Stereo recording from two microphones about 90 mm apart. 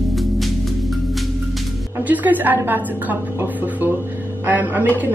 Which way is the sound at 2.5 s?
20° right (ahead or behind).